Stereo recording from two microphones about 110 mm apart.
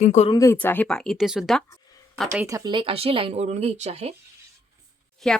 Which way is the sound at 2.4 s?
30° right (ahead or behind).